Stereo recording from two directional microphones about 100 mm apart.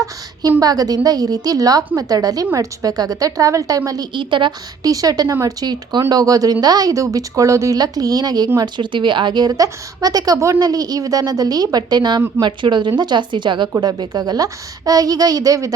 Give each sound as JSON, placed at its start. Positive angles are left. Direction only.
{"t": 0.6, "sound": "a woman's voice", "side_deg": -40}
{"t": 4.1, "sound": "a woman's voice", "side_deg": -55}
{"t": 4.8, "sound": "a woman's voice", "side_deg": -40}
{"t": 8.6, "sound": "a woman's voice", "side_deg": -50}